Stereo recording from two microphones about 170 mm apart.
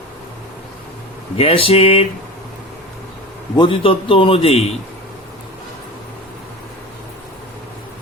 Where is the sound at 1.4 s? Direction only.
35° left (ahead or behind).